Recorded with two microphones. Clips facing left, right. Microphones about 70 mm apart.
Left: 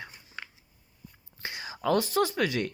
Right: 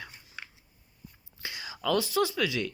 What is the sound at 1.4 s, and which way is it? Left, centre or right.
Speech, left.